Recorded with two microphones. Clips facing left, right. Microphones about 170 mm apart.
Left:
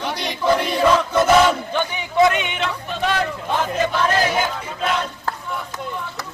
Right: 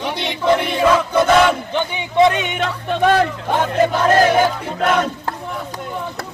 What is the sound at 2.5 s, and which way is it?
Speech, 45° right (ahead or behind).